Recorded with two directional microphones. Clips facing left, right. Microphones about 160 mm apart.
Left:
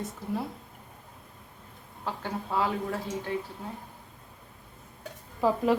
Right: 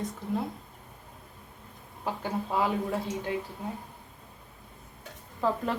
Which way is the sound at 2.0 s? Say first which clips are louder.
Right 2 dB; 15° right (ahead or behind).